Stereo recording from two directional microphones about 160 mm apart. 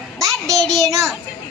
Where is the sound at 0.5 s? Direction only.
Centre (ahead or behind).